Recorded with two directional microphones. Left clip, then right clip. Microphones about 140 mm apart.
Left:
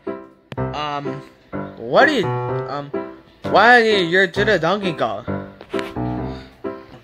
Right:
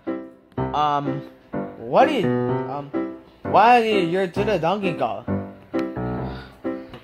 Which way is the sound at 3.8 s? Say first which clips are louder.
Left 4 dB; 65° right (ahead or behind).